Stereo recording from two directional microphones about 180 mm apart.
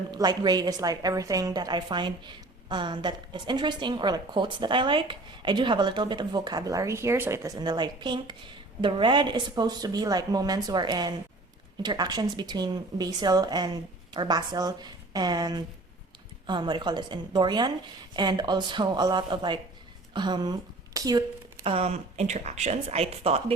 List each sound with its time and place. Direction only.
0.1 s a woman's voice: 20° right (ahead or behind)
21.6 s speech: 35° right (ahead or behind)